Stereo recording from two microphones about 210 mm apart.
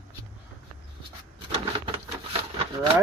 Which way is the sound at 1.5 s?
25° right (ahead or behind).